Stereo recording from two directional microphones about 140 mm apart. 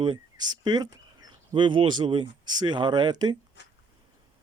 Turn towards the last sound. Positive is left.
turn(degrees=-30)  # may be behind; listen again after turning